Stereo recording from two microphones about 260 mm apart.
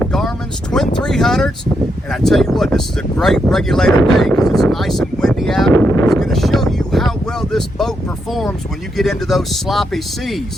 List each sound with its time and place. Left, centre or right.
0.0 s a sound: centre
0.9 s speech: centre
3.9 s speech: centre
4.2 s speech: centre
5.7 s speech: centre
6.1 s speech: centre